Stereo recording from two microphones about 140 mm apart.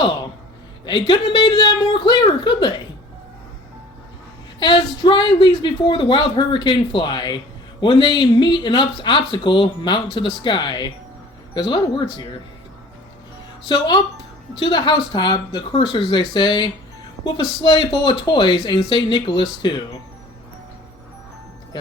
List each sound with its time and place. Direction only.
0.9 s speech: 35° left (ahead or behind)
5.0 s speech: 35° left (ahead or behind)
13.7 s speech: 30° left (ahead or behind)